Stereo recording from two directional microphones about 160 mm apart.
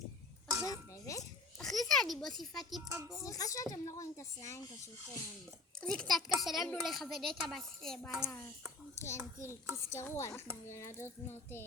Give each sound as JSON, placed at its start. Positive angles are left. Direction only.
{"t": 0.6, "sound": "music", "side_deg": 20}
{"t": 1.5, "sound": "a child's voice", "side_deg": 0}
{"t": 3.2, "sound": "speech", "side_deg": 20}
{"t": 5.8, "sound": "a woman's voice", "side_deg": 5}
{"t": 9.0, "sound": "child singing", "side_deg": 15}